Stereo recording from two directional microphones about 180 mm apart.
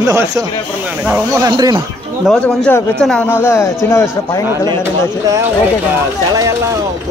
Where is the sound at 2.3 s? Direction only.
5° left (ahead or behind).